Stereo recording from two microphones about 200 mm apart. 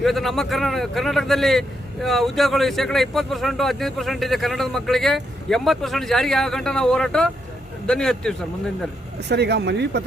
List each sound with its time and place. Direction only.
0.0 s a man's voice: centre (ahead or behind)
9.3 s speech: 55° right (ahead or behind)